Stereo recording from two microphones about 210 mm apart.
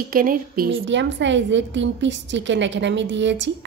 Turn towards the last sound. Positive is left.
turn(degrees=-60)  # may be behind; listen again after turning